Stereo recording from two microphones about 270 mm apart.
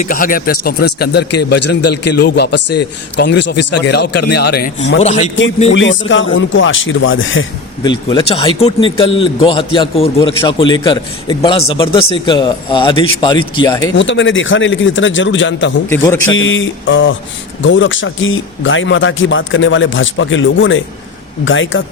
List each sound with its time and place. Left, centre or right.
0.0 s speech: left
4.9 s a man's voice: left
5.7 s speech: left
7.9 s a man's voice: centre
13.9 s speech: left
15.9 s speech: centre
16.3 s speech: left